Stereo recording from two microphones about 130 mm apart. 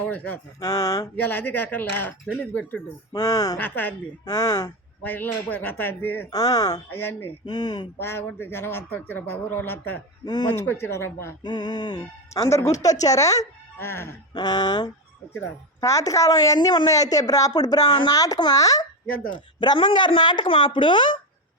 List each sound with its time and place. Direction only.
0.0 s speech: 10° left (ahead or behind)
0.6 s speech: 25° left (ahead or behind)
1.1 s speech: 15° left (ahead or behind)
3.1 s speech: 30° left (ahead or behind)
3.6 s speech: 15° left (ahead or behind)
4.3 s speech: 25° left (ahead or behind)
6.3 s speech: 30° left (ahead or behind)
6.9 s speech: 15° left (ahead or behind)
7.4 s speech: 30° left (ahead or behind)
7.9 s speech: 15° left (ahead or behind)
11.4 s speech: 35° left (ahead or behind); by 14.1 s 20° left (ahead or behind)
14.3 s speech: 35° left (ahead or behind)
15.3 s speech: 20° left (ahead or behind)
19.3 s speech: 40° left (ahead or behind)